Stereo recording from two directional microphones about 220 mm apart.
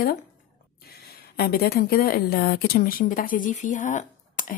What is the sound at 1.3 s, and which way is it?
A woman's voice, 45° left (ahead or behind).